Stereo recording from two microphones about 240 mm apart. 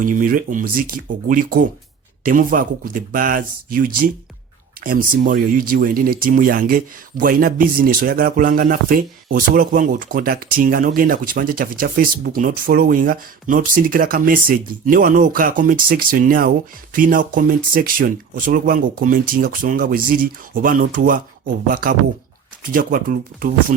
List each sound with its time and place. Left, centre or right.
0.0 s speech: right